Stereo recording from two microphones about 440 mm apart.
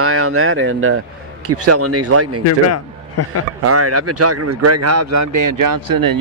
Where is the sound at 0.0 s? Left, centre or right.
Right.